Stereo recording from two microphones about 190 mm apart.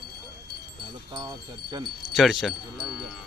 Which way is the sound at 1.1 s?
20° right (ahead or behind).